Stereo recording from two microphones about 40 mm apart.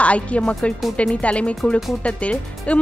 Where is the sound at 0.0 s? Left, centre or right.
Left.